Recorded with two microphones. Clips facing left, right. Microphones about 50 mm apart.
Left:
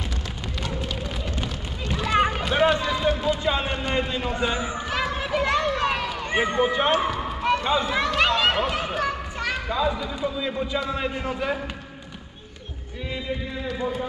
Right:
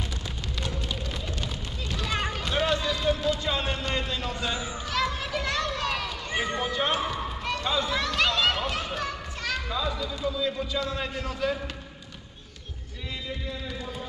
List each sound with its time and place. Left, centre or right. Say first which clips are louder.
1.4 s run: left 4 dB; centre